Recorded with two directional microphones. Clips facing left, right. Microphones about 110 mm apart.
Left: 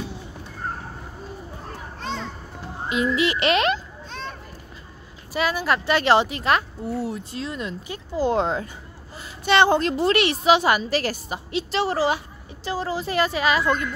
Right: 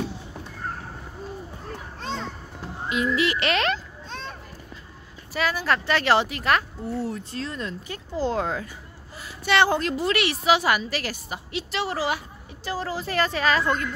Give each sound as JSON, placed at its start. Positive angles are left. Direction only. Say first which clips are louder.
{"t": 2.9, "sound": "a woman's voice", "louder": "left 2 dB", "side_deg": 20}
{"t": 5.3, "sound": "a woman's voice", "louder": "left 2 dB", "side_deg": 20}
{"t": 12.6, "sound": "speech", "louder": "left 3 dB", "side_deg": 20}